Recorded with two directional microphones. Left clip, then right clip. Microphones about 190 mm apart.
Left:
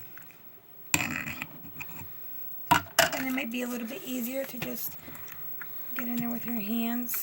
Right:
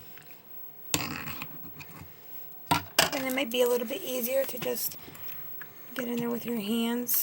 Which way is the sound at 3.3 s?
35° right (ahead or behind).